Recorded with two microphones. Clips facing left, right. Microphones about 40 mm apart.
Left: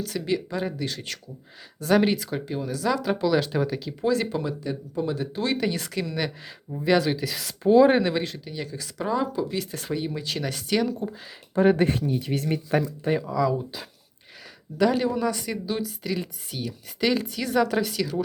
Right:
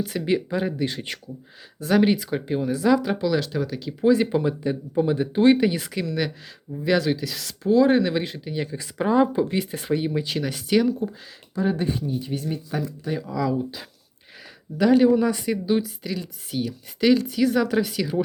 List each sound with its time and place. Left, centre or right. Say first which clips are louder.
0.3 s speech: right 4 dB; centre
1.8 s speech: right 1 dB; centre
2.5 s speech: right 6 dB; centre
3.0 s speech: even; centre
4.0 s speech: right 6 dB; centre
5.5 s speech: right 4 dB; centre
6.1 s speech: right 3 dB; centre
7.6 s speech: left 1 dB; left
8.2 s speech: right 3 dB; centre
11.5 s speech: left 4 dB; left
13.1 s speech: right 1 dB; centre